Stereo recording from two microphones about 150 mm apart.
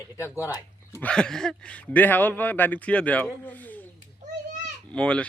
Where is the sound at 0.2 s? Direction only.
20° left (ahead or behind).